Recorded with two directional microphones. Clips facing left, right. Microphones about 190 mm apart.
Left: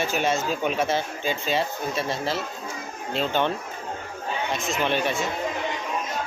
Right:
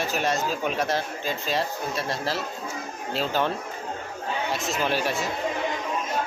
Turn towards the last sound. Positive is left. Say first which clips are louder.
# left 1 dB
turn(degrees=-5)  # may be behind; listen again after turning